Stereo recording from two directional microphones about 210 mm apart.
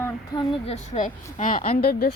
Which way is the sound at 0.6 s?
35° left (ahead or behind).